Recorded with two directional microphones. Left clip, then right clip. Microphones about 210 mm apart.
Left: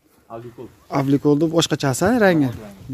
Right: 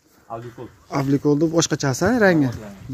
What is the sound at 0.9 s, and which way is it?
Speech, 15° left (ahead or behind).